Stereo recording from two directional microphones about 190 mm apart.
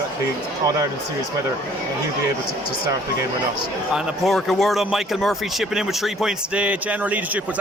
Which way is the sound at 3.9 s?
Centre (ahead or behind).